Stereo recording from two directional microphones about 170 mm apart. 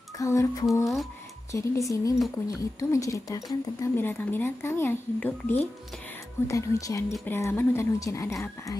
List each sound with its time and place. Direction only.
0.2 s a woman's voice: 20° left (ahead or behind)